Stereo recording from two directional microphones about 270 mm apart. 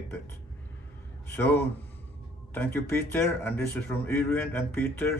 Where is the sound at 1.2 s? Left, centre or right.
Centre.